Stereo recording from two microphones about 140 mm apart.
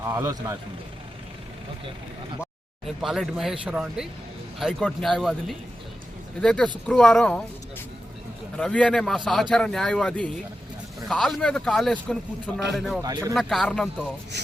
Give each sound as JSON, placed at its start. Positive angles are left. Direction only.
{"t": 0.0, "sound": "a man's voice", "side_deg": -20}
{"t": 2.8, "sound": "a man's voice", "side_deg": 0}
{"t": 8.5, "sound": "a man's voice", "side_deg": 5}
{"t": 13.0, "sound": "a man's voice", "side_deg": -25}
{"t": 13.3, "sound": "a man's voice", "side_deg": 0}